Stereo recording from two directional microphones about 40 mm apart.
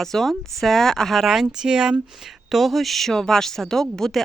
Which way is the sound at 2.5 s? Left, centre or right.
Centre.